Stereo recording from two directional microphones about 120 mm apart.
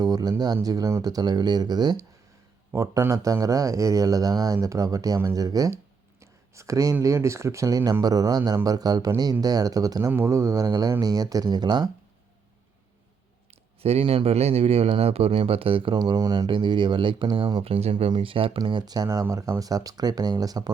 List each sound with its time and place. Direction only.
0.0 s a man's voice: 35° right (ahead or behind)
5.7 s a sound: 25° right (ahead or behind)
7.0 s a man's voice: 25° right (ahead or behind)
13.8 s speech: 55° right (ahead or behind)
16.0 s a man's voice: 30° right (ahead or behind)
16.5 s speech: 40° right (ahead or behind); by 17.9 s 60° right (ahead or behind)
17.9 s speech: 45° right (ahead or behind)
18.6 s a man's voice: 35° right (ahead or behind)